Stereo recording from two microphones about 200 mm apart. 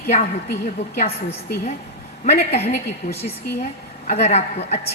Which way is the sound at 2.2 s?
35° left (ahead or behind).